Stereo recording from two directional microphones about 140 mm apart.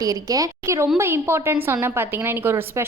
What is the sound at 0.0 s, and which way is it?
A woman's voice, 25° right (ahead or behind).